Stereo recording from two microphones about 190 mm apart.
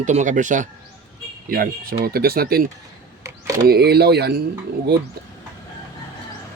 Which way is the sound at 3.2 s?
15° right (ahead or behind).